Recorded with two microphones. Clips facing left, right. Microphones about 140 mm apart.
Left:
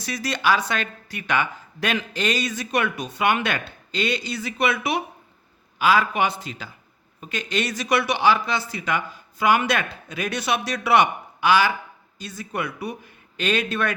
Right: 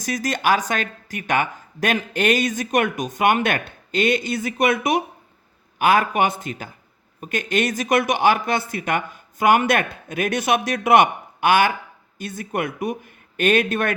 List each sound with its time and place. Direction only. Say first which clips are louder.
0.0 s speech: right 2 dB; 45° right (ahead or behind)